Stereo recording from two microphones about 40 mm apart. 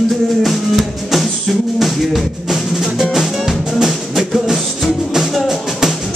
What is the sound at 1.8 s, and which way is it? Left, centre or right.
Music, centre.